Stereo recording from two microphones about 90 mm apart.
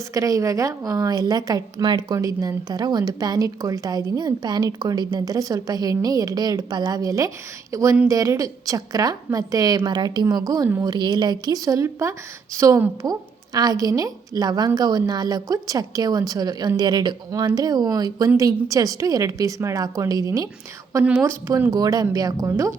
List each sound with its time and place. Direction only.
0.1 s a woman's voice: 40° right (ahead or behind)
13.0 s a woman's voice: 45° right (ahead or behind)
21.0 s a woman's voice: 20° right (ahead or behind)
21.2 s a woman's voice: 35° right (ahead or behind)